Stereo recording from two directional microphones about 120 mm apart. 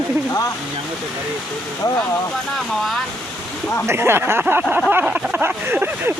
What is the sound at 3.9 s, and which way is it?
Speech, 20° right (ahead or behind).